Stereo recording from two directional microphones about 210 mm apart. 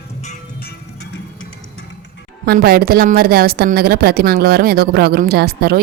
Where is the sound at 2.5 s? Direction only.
50° right (ahead or behind).